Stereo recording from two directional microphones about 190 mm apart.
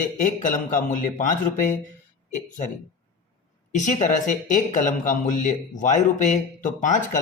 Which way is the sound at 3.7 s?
40° left (ahead or behind).